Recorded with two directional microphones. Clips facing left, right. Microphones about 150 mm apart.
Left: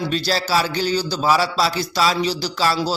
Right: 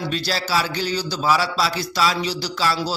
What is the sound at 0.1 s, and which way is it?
A man's voice, 35° left (ahead or behind).